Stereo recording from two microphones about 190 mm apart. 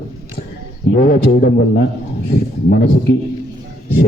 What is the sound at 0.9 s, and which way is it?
A man's voice, 50° left (ahead or behind).